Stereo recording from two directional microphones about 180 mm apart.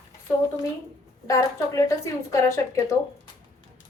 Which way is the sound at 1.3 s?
15° left (ahead or behind).